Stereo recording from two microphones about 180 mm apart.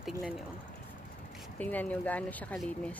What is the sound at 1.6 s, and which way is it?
Speech, 10° left (ahead or behind).